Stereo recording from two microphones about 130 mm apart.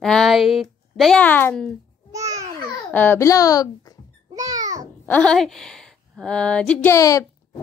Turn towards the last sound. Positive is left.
turn(degrees=25)  # may be behind; listen again after turning